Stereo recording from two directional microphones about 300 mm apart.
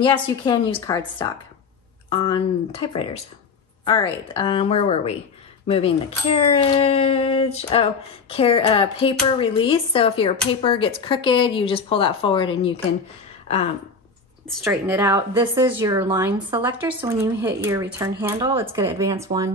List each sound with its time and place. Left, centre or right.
0.0 s speech: centre
14.5 s speech: centre